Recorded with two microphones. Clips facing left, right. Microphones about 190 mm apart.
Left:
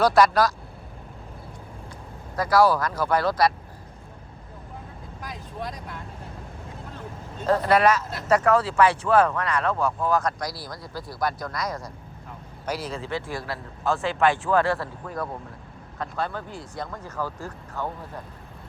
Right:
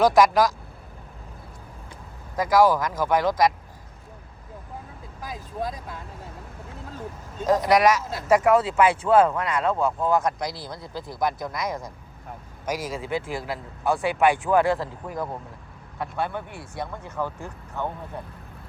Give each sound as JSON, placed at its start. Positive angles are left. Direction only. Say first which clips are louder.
{"t": 0.0, "sound": "speech", "louder": "right 1 dB", "side_deg": -15}
{"t": 2.3, "sound": "speech", "louder": "right 1 dB", "side_deg": -15}
{"t": 7.4, "sound": "speech", "louder": "right 1 dB", "side_deg": -15}
{"t": 16.8, "sound": "speech", "louder": "right 2 dB", "side_deg": -20}